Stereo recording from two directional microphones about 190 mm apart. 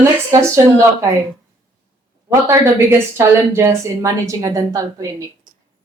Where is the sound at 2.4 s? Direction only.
15° right (ahead or behind).